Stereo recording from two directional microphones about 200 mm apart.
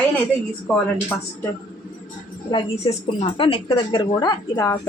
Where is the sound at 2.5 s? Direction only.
20° left (ahead or behind).